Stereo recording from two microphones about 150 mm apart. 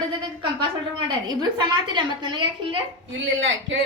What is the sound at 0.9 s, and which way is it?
A woman's voice, 30° right (ahead or behind).